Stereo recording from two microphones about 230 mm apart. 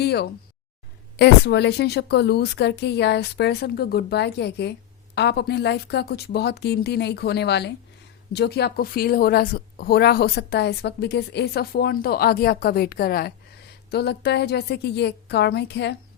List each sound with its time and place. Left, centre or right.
0.0 s a woman's voice: left